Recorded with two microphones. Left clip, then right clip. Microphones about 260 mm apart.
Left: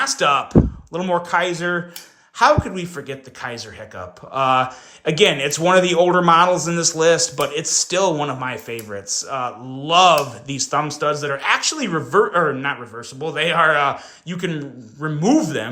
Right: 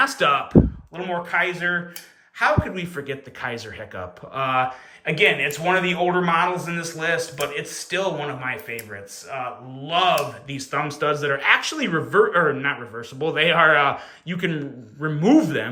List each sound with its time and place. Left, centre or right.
0.0 s speech: centre
0.9 s speech: centre